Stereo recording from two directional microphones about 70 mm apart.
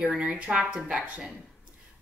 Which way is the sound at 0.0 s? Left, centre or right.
Centre.